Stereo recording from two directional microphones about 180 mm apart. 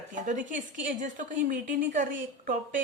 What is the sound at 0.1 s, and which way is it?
Speech, 45° right (ahead or behind).